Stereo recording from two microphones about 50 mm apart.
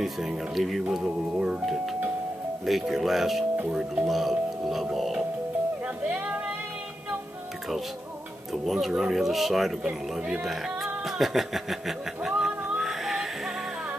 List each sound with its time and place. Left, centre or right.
0.0 s speech: centre
1.0 s speech: centre
2.6 s speech: centre
3.6 s speech: centre
4.1 s speech: centre
6.0 s speech: right
8.6 s speech: centre
11.1 s a sound: centre